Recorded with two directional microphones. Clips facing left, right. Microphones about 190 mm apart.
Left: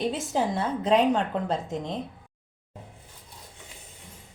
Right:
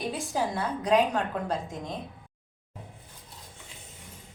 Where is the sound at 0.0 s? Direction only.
20° left (ahead or behind).